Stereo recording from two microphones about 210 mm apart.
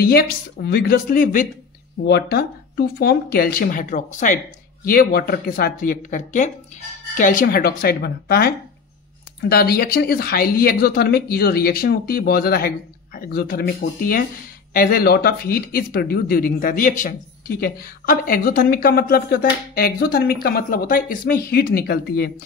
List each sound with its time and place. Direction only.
0.0 s speech: 45° left (ahead or behind)
2.0 s speech: 50° left (ahead or behind)